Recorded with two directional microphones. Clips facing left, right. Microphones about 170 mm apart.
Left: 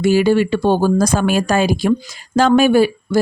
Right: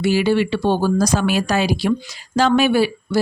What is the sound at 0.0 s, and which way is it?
Speech, 45° left (ahead or behind).